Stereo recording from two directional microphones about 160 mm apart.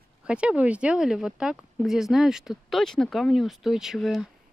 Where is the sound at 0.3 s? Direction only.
5° right (ahead or behind).